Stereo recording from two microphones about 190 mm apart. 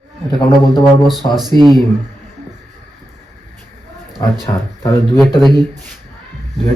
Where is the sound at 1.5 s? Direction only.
20° right (ahead or behind).